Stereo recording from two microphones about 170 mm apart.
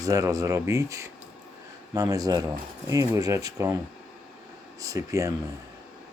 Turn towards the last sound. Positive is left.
turn(degrees=-20)  # may be behind; listen again after turning